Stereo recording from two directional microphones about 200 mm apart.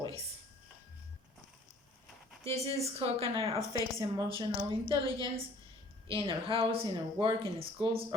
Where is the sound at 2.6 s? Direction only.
30° right (ahead or behind).